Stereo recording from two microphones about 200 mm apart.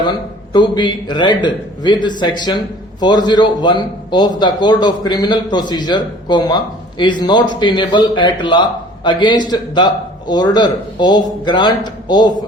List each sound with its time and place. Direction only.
0.0 s a man's voice: 20° left (ahead or behind)